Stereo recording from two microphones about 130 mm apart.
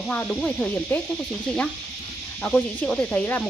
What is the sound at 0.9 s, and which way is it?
Speech, 15° left (ahead or behind).